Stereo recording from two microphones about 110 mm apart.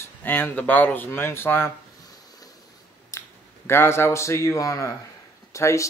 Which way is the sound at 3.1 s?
25° left (ahead or behind).